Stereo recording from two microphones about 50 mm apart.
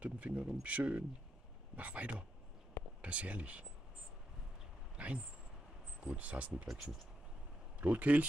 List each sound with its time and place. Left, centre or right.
0.0 s speech: right
4.9 s speech: right
6.7 s speech: centre
7.8 s speech: right